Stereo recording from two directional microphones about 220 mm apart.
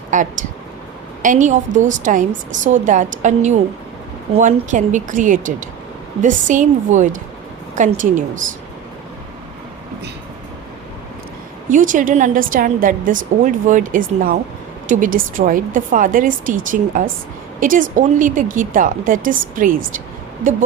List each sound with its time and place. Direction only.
0.1 s a woman's voice: 35° right (ahead or behind)
11.7 s a woman's voice: 35° right (ahead or behind)